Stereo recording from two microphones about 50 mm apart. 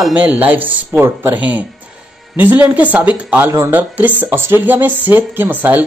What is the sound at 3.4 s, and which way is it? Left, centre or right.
Speech, right.